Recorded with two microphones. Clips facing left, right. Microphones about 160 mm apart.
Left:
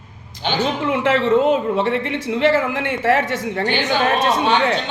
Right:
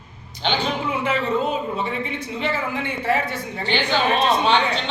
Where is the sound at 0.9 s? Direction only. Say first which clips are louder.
Left 8 dB; 80° left.